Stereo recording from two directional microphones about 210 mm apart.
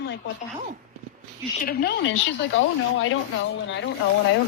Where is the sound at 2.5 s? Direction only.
65° left (ahead or behind).